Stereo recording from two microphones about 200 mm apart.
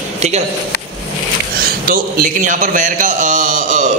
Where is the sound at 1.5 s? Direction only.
45° right (ahead or behind).